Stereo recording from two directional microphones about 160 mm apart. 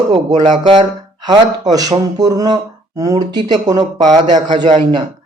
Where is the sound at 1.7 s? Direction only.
25° right (ahead or behind).